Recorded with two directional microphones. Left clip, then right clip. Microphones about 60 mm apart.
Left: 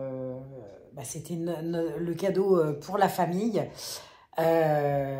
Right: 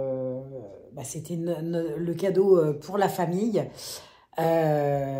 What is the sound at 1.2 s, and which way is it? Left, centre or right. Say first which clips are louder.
Speech: right 2 dB; right.